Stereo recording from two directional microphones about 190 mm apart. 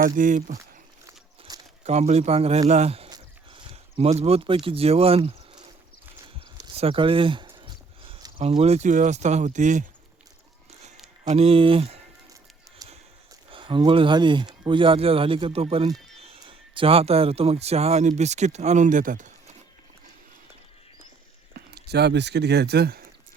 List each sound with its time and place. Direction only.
0.0 s speech: 45° right (ahead or behind)
1.0 s a sound: 20° right (ahead or behind)
1.8 s speech: 35° right (ahead or behind)
6.7 s speech: 30° right (ahead or behind)
11.3 s speech: 30° right (ahead or behind)
13.5 s speech: 25° right (ahead or behind); by 19.5 s 40° right (ahead or behind)
21.5 s speech: 60° right (ahead or behind)